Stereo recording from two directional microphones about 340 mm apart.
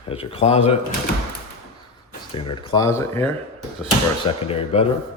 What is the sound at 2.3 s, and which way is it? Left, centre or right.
Speech, centre.